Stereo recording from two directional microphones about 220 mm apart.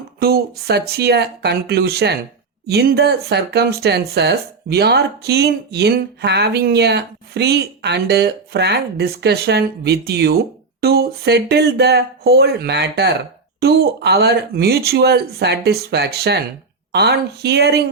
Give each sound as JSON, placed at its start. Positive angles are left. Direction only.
{"t": 0.2, "sound": "speech", "side_deg": -45}